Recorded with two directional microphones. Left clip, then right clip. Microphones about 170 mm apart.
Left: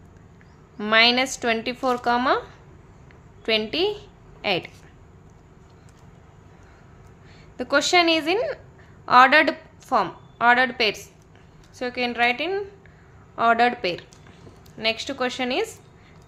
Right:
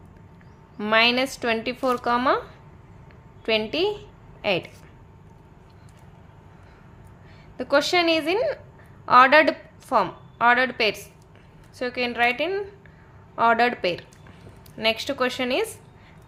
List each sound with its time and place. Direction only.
0.8 s speech: 5° right (ahead or behind)
3.4 s a woman's voice: 5° right (ahead or behind)
7.5 s a woman's voice: centre (ahead or behind)